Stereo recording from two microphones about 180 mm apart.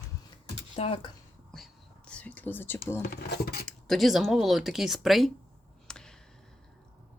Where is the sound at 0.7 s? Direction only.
35° left (ahead or behind).